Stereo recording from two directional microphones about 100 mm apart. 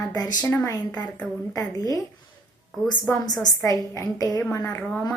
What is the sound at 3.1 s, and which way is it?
A woman's voice, 40° left (ahead or behind).